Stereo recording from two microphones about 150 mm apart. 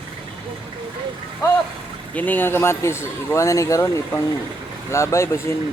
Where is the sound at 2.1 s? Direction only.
10° left (ahead or behind).